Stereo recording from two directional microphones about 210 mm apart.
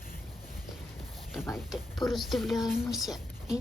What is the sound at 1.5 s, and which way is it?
Speech, centre (ahead or behind).